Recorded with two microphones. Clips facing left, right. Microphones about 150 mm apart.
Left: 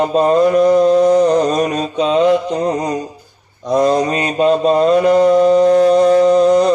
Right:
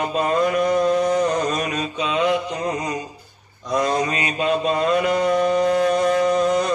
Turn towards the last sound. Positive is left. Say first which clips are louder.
# left 8 dB
turn(degrees=35)  # may be behind; listen again after turning